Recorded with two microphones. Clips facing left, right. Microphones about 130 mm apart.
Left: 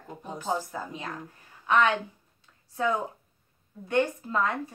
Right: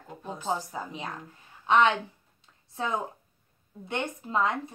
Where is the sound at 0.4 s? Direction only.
20° right (ahead or behind).